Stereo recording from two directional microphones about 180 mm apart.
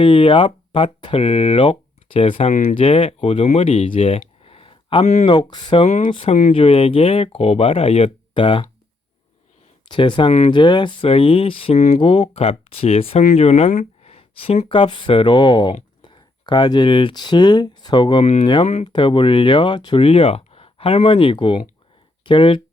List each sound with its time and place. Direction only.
0.0 s speech: 30° left (ahead or behind)
4.4 s a sound: 30° left (ahead or behind)
5.2 s speech: 25° left (ahead or behind)
9.9 s speech: 25° left (ahead or behind)